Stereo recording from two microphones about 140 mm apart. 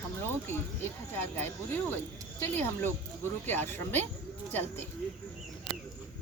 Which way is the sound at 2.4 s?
15° left (ahead or behind).